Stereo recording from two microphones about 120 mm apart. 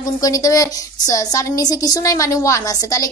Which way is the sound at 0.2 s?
30° left (ahead or behind).